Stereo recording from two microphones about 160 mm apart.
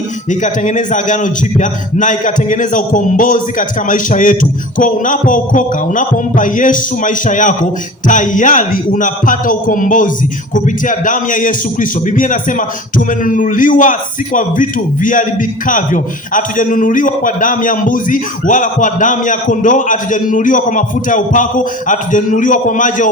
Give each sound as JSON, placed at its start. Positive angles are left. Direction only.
{"t": 0.3, "sound": "a man's voice", "side_deg": 50}